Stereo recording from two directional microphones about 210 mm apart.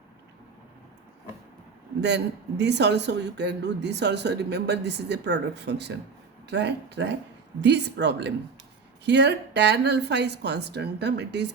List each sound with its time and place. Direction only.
2.0 s speech: 55° right (ahead or behind)